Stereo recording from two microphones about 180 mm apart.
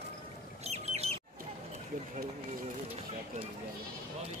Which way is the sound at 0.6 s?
35° right (ahead or behind).